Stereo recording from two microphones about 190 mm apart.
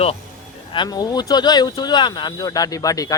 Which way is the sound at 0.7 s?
20° left (ahead or behind).